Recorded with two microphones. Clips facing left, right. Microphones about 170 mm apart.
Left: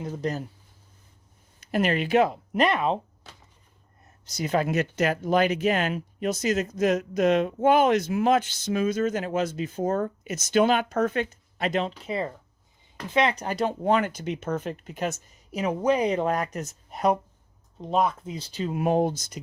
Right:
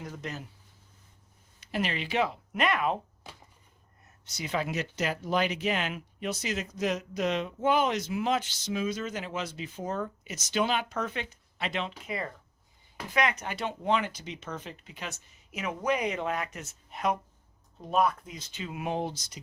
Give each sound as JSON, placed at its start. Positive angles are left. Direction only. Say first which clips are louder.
{"t": 0.0, "sound": "speech", "louder": "left 9 dB", "side_deg": 35}
{"t": 1.6, "sound": "speech", "louder": "left 8 dB", "side_deg": 50}
{"t": 4.3, "sound": "speech", "louder": "left 7 dB", "side_deg": 40}
{"t": 17.7, "sound": "speech", "louder": "left 2 dB", "side_deg": 20}